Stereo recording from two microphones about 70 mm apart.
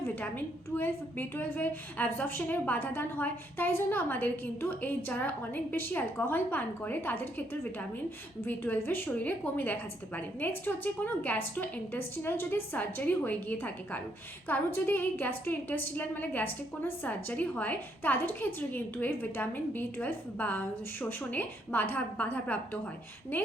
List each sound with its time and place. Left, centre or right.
0.0 s a woman's voice: left